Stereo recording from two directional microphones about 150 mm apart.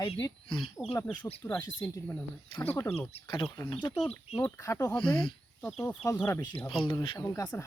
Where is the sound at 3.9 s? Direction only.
10° left (ahead or behind).